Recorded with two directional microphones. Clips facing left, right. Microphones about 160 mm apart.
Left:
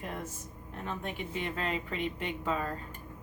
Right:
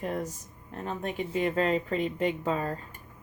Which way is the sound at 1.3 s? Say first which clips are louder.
Right 9 dB; 40° right (ahead or behind).